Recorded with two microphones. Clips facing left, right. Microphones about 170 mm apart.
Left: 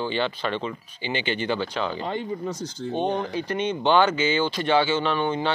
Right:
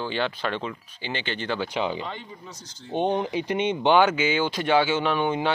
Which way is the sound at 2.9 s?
20° right (ahead or behind).